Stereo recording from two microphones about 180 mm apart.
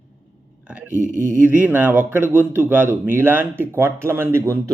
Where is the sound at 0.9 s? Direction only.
45° right (ahead or behind).